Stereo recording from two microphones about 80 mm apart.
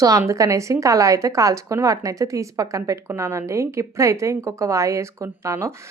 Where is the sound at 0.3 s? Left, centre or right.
Right.